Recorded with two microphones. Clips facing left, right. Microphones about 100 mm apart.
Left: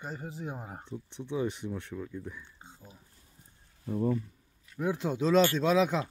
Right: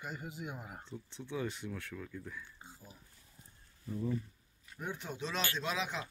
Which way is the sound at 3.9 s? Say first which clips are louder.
Left 8 dB; 60° left (ahead or behind).